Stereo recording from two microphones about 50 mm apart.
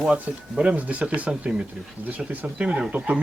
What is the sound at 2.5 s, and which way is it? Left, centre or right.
Speech, right.